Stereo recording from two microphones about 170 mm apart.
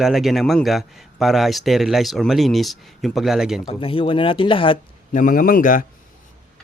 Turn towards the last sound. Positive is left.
turn(degrees=55)  # may be behind; listen again after turning